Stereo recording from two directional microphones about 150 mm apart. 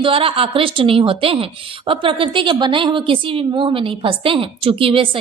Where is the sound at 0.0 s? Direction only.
35° right (ahead or behind).